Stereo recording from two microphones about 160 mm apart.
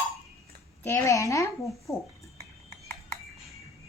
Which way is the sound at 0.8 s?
20° left (ahead or behind).